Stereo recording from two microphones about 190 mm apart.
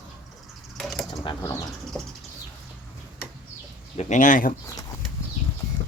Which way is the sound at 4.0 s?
40° left (ahead or behind).